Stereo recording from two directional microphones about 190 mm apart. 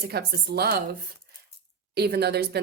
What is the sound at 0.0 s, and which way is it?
Speech, 55° right (ahead or behind).